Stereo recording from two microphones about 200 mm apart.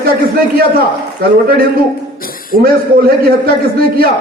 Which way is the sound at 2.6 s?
45° right (ahead or behind).